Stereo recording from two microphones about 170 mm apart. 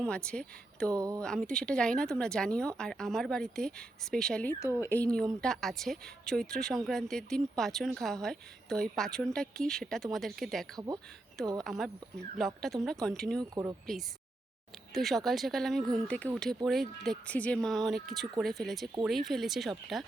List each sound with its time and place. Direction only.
0.0 s speech: 5° left (ahead or behind)
0.9 s speech: 20° right (ahead or behind)
1.2 s speech: 5° left (ahead or behind)
10.8 s speech: 20° right (ahead or behind)
11.6 s speech: centre (ahead or behind)
13.5 s speech: 20° right (ahead or behind)
14.9 s speech: centre (ahead or behind)